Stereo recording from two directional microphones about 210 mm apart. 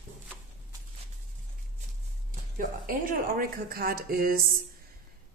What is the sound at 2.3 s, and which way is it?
A woman's voice, 40° right (ahead or behind).